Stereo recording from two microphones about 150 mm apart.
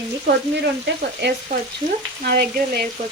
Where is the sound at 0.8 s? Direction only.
90° right.